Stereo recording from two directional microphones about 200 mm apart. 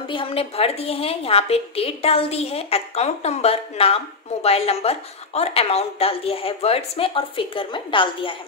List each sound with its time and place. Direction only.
0.1 s a woman's voice: 25° left (ahead or behind)